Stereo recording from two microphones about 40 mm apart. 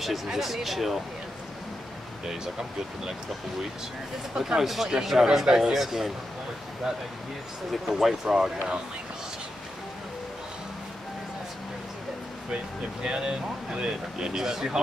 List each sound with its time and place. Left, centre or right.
0.0 s speech: centre
4.4 s speech: centre
5.5 s speech: centre
5.8 s speech: centre
7.9 s speech: centre
13.0 s speech: right